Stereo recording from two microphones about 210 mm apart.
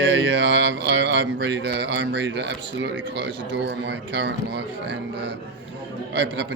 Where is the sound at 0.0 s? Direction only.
60° right (ahead or behind).